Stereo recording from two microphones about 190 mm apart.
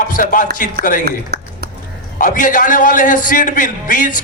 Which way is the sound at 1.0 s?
55° right (ahead or behind).